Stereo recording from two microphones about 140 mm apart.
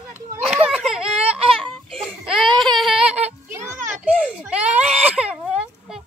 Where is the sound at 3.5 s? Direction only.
20° right (ahead or behind).